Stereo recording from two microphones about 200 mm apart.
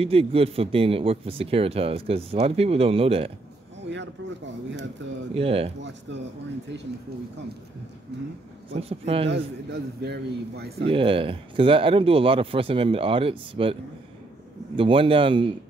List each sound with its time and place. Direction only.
0.0 s speech: 30° right (ahead or behind)
3.9 s a man's voice: 65° right (ahead or behind)
5.3 s speech: 30° right (ahead or behind)
5.8 s a man's voice: 60° right (ahead or behind)
8.7 s speech: 30° right (ahead or behind)
9.3 s a man's voice: 55° right (ahead or behind)
10.9 s speech: 25° right (ahead or behind)
14.8 s speech: 25° right (ahead or behind)